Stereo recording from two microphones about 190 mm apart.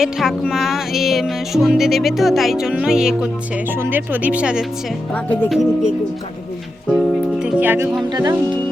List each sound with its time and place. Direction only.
0.0 s music: centre (ahead or behind)
3.7 s speech: 10° right (ahead or behind)
5.1 s music: 10° left (ahead or behind)
6.9 s speech: centre (ahead or behind); by 8.4 s 20° right (ahead or behind)